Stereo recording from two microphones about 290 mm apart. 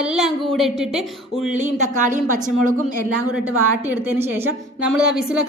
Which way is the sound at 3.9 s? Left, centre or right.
Centre.